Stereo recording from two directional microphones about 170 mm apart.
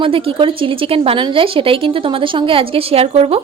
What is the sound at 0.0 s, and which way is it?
A woman's voice, 30° right (ahead or behind).